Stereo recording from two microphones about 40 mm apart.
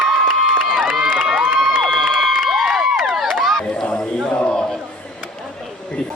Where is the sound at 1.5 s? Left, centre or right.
Centre.